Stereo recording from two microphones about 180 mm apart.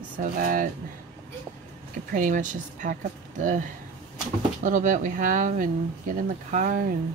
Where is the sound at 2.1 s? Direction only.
45° right (ahead or behind).